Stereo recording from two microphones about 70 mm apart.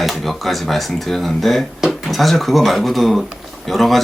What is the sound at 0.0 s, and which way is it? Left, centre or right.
Speech, centre.